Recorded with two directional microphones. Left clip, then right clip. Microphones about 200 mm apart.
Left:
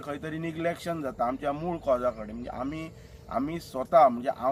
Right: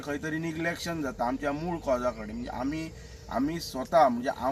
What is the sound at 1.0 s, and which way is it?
Speech, 10° left (ahead or behind).